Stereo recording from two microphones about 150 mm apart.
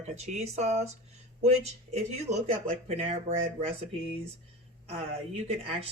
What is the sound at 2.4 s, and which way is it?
Speech, 45° right (ahead or behind).